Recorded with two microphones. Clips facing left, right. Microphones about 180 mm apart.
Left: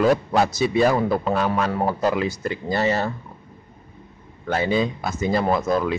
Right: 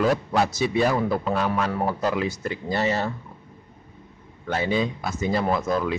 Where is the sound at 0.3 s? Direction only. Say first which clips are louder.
Left 3 dB; 35° left (ahead or behind).